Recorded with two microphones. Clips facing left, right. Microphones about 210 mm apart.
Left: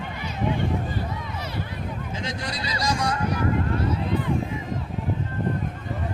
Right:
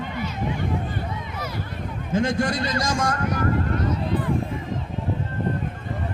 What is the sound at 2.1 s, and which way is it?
A man's voice, 50° right (ahead or behind).